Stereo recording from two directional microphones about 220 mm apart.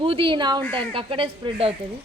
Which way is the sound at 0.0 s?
25° right (ahead or behind).